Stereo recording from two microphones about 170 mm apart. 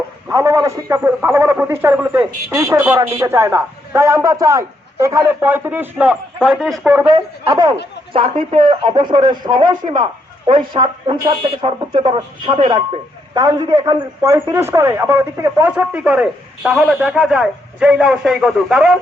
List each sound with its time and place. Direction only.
0.3 s speech: 20° right (ahead or behind); by 6.9 s centre (ahead or behind)
7.1 s speech: 20° right (ahead or behind); by 18.9 s centre (ahead or behind)